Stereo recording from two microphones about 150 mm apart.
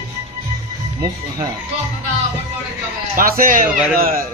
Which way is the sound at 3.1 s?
70° right (ahead or behind).